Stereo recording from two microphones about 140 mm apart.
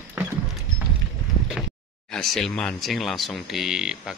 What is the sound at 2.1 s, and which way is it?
Speech, centre (ahead or behind).